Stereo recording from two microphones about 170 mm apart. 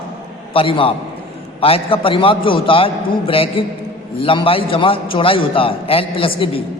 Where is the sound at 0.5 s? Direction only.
30° left (ahead or behind).